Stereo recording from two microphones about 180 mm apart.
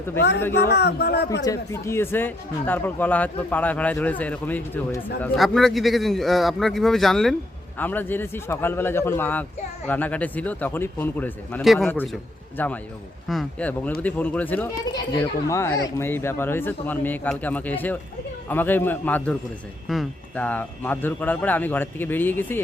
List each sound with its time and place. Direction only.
0.2 s a man's voice: 70° left (ahead or behind)
1.5 s a man's voice: 15° left (ahead or behind)
11.6 s a man's voice: centre (ahead or behind)